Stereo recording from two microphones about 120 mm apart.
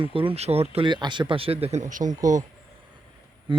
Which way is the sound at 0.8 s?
40° right (ahead or behind).